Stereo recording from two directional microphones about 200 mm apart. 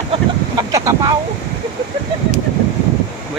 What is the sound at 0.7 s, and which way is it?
Speech, 15° right (ahead or behind).